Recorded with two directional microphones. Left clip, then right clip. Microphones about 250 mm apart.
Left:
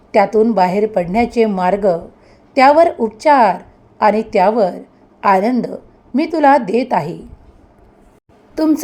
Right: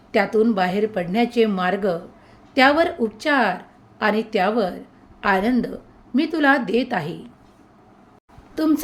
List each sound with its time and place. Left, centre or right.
0.1 s a woman's voice: centre
8.5 s speech: centre